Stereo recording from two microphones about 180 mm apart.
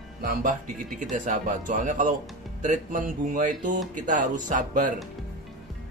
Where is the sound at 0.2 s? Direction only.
50° right (ahead or behind).